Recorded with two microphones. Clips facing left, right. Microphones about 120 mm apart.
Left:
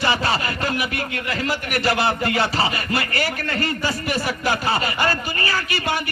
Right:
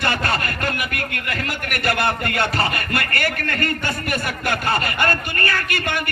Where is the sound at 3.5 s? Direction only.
55° right (ahead or behind).